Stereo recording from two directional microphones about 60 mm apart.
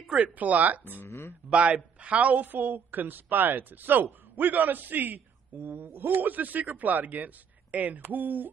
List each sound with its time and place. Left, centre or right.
0.1 s speech: right
1.0 s speech: left
1.5 s a woman's voice: right